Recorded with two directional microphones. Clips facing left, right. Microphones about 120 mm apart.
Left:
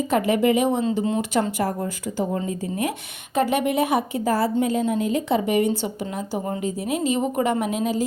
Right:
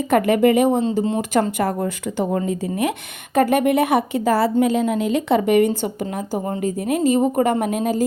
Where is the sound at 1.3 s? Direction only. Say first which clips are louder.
Right 3 dB; 55° right (ahead or behind).